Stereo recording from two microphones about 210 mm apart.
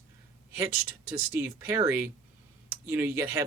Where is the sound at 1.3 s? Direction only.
10° right (ahead or behind).